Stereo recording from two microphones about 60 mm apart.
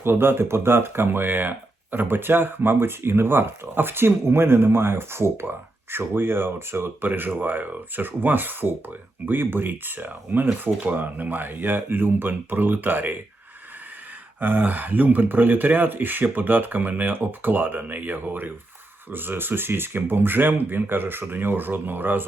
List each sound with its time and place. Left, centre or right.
0.0 s speech: right
7.0 s speech: right
14.4 s speech: right